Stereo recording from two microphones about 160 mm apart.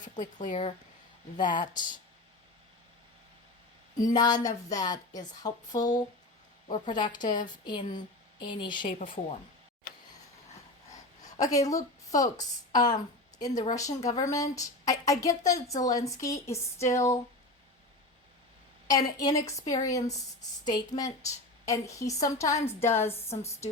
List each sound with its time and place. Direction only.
0.0 s speech: 50° left (ahead or behind)
1.4 s a woman's voice: 30° left (ahead or behind)
4.0 s a woman's voice: 25° left (ahead or behind)
9.0 s speech: 45° left (ahead or behind)
11.3 s a woman's voice: 20° left (ahead or behind)
18.9 s a woman's voice: 25° left (ahead or behind)